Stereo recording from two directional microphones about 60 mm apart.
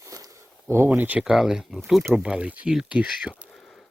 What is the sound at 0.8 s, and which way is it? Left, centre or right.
Speech, right.